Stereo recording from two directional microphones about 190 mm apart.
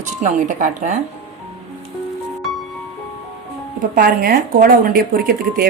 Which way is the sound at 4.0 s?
50° right (ahead or behind).